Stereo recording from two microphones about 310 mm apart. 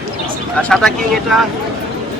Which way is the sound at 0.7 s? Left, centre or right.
Centre.